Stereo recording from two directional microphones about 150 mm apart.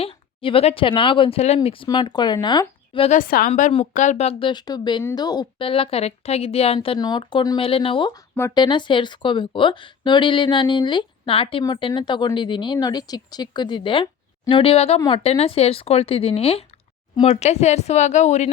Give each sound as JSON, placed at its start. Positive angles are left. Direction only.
{"t": 0.0, "sound": "speech", "side_deg": 40}
{"t": 3.1, "sound": "a woman's voice", "side_deg": 70}
{"t": 3.9, "sound": "speech", "side_deg": 55}